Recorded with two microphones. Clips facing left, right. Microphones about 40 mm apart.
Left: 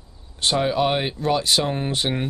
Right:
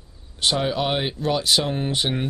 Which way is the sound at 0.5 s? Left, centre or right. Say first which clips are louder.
Left 5 dB; centre.